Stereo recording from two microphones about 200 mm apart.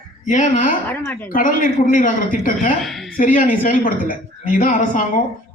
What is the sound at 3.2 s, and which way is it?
A woman's voice, 45° left (ahead or behind).